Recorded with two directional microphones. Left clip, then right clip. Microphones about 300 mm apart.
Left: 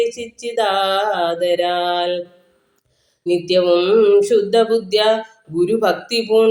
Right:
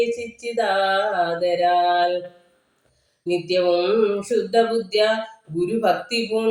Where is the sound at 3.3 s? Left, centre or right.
Left.